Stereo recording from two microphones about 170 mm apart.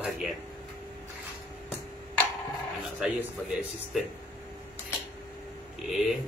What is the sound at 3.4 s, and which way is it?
Speech, centre (ahead or behind).